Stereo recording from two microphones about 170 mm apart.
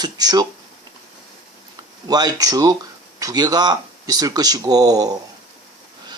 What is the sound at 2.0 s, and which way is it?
Speech, 25° right (ahead or behind).